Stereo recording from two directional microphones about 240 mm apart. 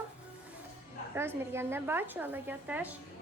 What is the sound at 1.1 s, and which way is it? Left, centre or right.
A woman's voice, centre.